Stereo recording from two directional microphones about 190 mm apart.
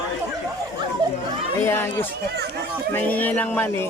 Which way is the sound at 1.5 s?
10° left (ahead or behind).